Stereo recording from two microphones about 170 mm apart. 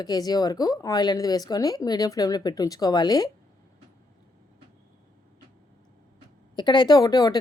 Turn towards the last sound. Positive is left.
turn(degrees=20)  # may be behind; listen again after turning